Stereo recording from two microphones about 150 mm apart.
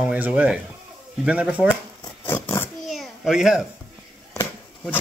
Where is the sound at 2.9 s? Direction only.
Centre (ahead or behind).